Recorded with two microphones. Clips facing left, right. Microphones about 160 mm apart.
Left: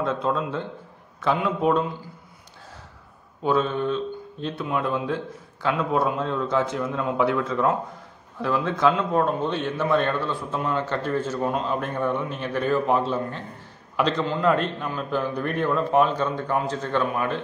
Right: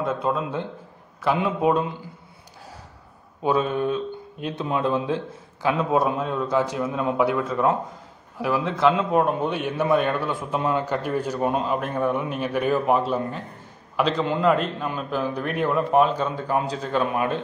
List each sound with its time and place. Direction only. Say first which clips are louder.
0.0 s a man's voice: even; 10° right (ahead or behind)
3.4 s a man's voice: right 1 dB; 10° right (ahead or behind)
8.9 s a man's voice: right 1 dB; 15° right (ahead or behind)